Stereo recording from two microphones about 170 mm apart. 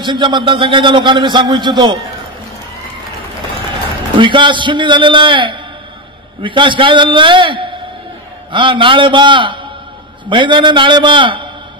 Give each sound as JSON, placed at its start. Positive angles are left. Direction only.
{"t": 0.0, "sound": "a man's voice", "side_deg": -30}
{"t": 4.2, "sound": "a man's voice", "side_deg": -30}